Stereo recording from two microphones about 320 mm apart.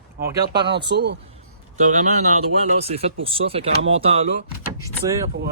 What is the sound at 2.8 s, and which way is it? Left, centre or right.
Speech, centre.